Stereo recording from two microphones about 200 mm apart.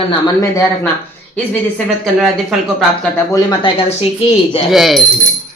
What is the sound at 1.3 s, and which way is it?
Speech, 5° left (ahead or behind).